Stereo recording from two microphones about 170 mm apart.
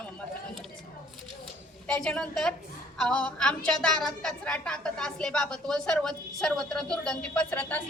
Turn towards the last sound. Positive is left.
turn(degrees=10)  # may be behind; listen again after turning